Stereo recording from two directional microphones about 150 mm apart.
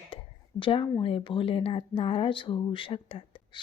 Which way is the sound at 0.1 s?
35° left (ahead or behind).